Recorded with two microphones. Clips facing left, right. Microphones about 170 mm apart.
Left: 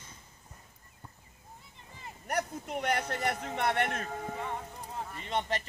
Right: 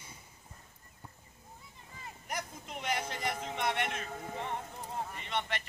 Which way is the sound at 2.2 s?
60° left (ahead or behind).